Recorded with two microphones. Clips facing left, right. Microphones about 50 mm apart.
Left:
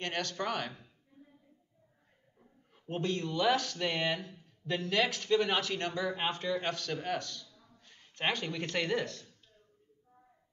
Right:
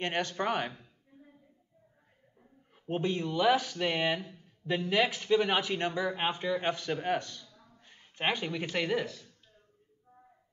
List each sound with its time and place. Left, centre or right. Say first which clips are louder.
0.0 s speech: right 4 dB; right
1.1 s a sound: right 2 dB; right
2.7 s speech: right 3 dB; centre